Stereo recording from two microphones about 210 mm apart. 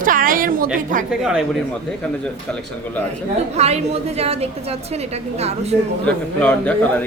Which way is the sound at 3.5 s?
30° right (ahead or behind).